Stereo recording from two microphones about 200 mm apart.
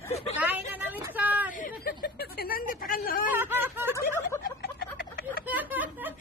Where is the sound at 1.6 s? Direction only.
45° left (ahead or behind).